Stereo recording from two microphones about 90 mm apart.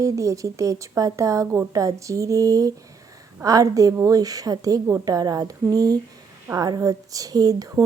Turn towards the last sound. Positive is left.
turn(degrees=-45)  # may be behind; listen again after turning